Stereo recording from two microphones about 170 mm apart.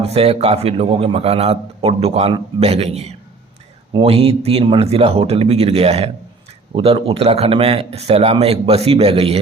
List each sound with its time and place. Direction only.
0.0 s a man's voice: 35° right (ahead or behind)